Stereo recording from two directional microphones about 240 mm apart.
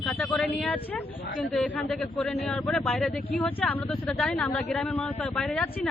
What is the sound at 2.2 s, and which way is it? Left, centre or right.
Speech, centre.